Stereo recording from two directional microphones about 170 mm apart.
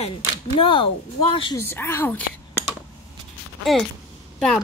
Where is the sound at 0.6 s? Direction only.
30° left (ahead or behind).